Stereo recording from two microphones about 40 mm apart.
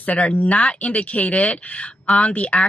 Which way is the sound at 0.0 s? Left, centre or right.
Left.